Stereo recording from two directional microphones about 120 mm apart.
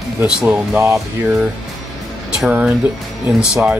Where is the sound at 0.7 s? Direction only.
25° right (ahead or behind).